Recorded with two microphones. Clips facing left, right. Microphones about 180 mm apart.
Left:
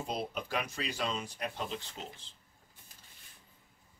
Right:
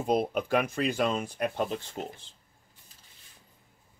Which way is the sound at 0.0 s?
55° right (ahead or behind).